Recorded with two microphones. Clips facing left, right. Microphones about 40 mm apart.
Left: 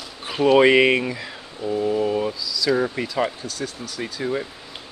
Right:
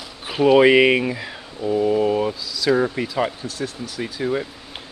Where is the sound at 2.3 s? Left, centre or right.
Right.